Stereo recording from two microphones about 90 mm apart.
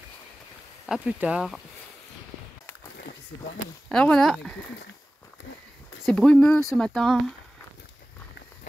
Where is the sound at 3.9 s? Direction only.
10° left (ahead or behind).